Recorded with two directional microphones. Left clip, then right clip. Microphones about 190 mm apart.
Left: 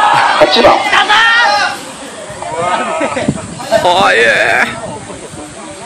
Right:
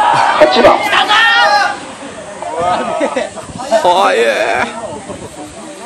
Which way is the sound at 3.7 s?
5° right (ahead or behind).